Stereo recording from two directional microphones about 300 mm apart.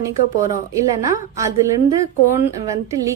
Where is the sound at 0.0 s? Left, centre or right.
Centre.